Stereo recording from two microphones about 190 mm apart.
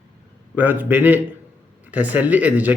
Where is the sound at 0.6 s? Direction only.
10° right (ahead or behind).